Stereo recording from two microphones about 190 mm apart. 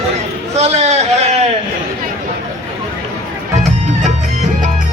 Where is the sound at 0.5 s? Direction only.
35° right (ahead or behind).